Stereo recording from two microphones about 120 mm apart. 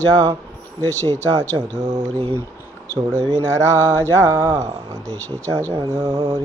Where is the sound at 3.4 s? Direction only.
25° right (ahead or behind).